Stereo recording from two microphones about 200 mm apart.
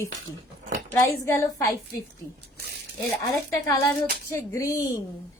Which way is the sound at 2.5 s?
55° right (ahead or behind).